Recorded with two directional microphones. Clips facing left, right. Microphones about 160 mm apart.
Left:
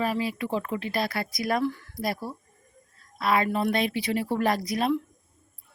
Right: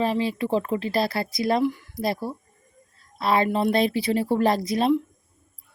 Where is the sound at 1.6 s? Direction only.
15° right (ahead or behind).